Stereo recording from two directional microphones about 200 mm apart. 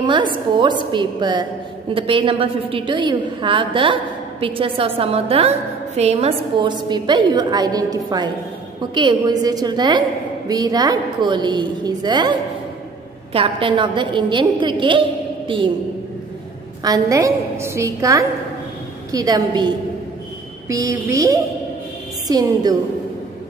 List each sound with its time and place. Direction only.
0.0 s a woman's voice: 25° right (ahead or behind)
16.8 s a woman's voice: 15° right (ahead or behind)